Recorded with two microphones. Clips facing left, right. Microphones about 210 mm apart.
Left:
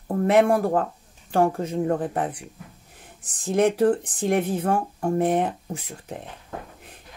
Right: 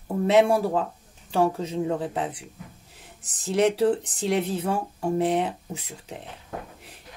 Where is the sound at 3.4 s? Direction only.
55° left (ahead or behind).